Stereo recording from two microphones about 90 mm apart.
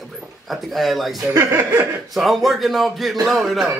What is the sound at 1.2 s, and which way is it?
Speech, 35° right (ahead or behind).